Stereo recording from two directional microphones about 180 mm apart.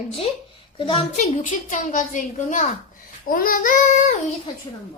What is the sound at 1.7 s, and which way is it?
A child's voice, 45° left (ahead or behind).